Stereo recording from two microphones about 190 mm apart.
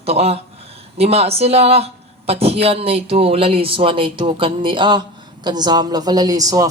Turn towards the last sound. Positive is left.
turn(degrees=-20)  # may be behind; listen again after turning